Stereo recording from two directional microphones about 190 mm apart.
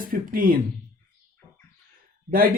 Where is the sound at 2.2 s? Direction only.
45° right (ahead or behind).